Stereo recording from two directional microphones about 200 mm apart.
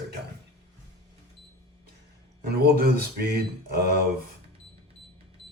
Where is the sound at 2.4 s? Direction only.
50° right (ahead or behind).